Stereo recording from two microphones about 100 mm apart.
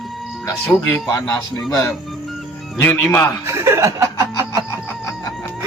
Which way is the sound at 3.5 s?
30° right (ahead or behind).